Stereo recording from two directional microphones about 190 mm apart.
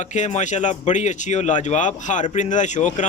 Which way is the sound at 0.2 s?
40° left (ahead or behind).